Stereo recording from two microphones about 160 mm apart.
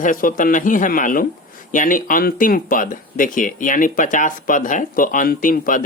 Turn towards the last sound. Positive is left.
turn(degrees=60)  # may be behind; listen again after turning